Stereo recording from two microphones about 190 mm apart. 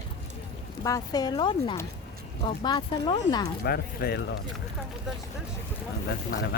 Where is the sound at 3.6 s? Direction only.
55° left (ahead or behind).